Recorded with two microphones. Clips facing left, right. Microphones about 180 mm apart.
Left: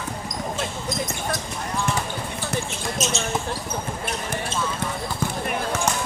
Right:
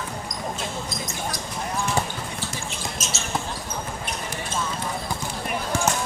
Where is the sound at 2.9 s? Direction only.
Centre (ahead or behind).